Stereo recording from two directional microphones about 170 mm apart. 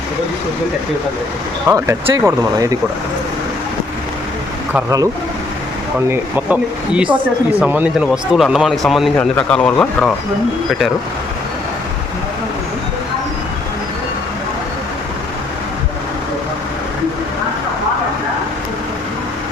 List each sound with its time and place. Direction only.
1.6 s speech: 15° right (ahead or behind)
4.7 s speech: 20° right (ahead or behind)
6.1 s speech: 10° right (ahead or behind); by 10.1 s 5° left (ahead or behind)